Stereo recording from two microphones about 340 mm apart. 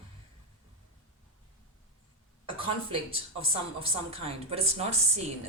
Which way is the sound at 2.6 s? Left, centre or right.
Centre.